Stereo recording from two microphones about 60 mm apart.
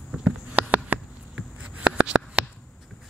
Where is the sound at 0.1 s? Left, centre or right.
Centre.